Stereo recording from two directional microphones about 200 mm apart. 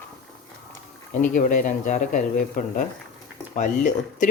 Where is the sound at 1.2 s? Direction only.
40° left (ahead or behind).